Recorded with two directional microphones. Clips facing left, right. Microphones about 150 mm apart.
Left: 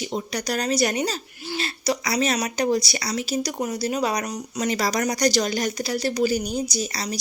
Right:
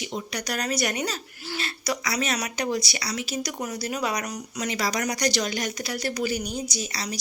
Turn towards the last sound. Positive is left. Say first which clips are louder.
# left 4 dB
turn(degrees=40)  # may be behind; listen again after turning